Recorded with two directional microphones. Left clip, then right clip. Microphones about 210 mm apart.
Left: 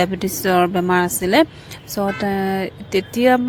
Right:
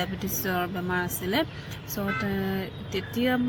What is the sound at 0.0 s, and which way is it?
Speech, 45° left (ahead or behind).